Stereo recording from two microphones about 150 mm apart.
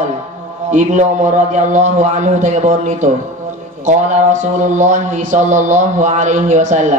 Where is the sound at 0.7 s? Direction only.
55° right (ahead or behind).